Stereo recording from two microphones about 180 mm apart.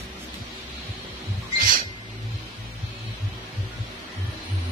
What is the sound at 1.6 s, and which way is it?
Music, 50° right (ahead or behind).